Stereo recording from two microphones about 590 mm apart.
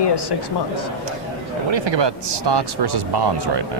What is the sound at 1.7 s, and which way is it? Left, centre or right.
Speech, right.